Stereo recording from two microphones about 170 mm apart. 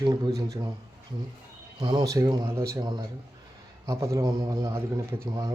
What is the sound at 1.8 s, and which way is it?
A man's voice, 25° right (ahead or behind).